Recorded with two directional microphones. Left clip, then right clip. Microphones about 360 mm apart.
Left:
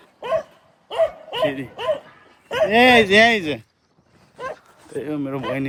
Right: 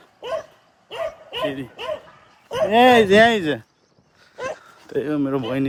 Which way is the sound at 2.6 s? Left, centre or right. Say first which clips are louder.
Even; centre.